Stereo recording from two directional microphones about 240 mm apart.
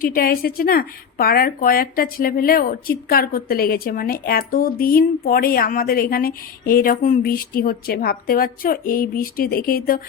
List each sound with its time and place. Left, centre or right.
0.0 s speech: left